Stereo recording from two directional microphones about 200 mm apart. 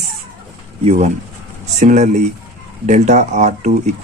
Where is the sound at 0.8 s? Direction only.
30° right (ahead or behind).